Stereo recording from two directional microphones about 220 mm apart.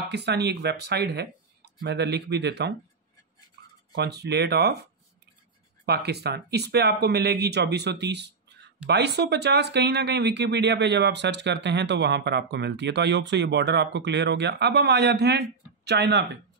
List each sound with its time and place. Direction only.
0.1 s speech: 50° right (ahead or behind)
3.9 s speech: 50° right (ahead or behind)
5.9 s speech: 50° right (ahead or behind)